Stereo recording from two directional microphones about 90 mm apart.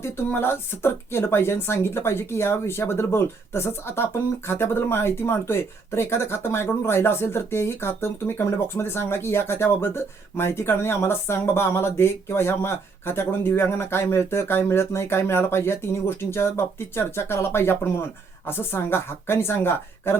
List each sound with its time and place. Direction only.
0.0 s speech: 25° left (ahead or behind)